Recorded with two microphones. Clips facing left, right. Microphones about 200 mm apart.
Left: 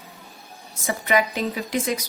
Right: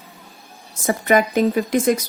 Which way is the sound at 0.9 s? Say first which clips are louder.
Right 5 dB; 50° right (ahead or behind).